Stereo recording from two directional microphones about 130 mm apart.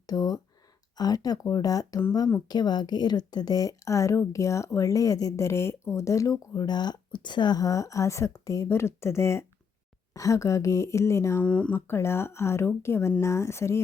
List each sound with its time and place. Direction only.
0.1 s speech: 30° left (ahead or behind)
11.4 s speech: 10° left (ahead or behind)